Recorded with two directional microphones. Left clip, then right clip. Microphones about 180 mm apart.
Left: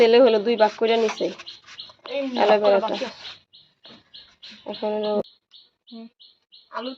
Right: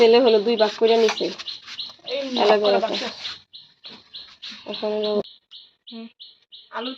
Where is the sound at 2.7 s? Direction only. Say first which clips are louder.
Even; 15° left (ahead or behind).